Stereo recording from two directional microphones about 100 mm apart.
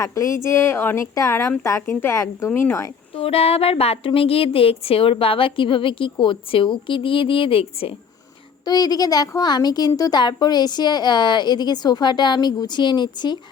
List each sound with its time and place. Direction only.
0.0 s a woman's voice: 30° left (ahead or behind)
3.2 s a woman's voice: 75° left (ahead or behind)
8.6 s speech: 40° left (ahead or behind)